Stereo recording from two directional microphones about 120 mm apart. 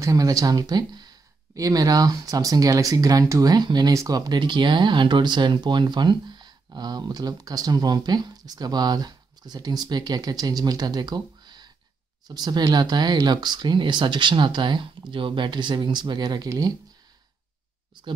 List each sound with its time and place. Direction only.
0.0 s speech: 30° right (ahead or behind)